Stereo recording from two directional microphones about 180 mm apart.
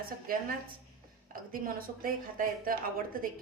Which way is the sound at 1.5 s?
50° right (ahead or behind).